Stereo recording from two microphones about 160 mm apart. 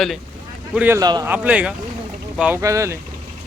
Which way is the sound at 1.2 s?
10° right (ahead or behind).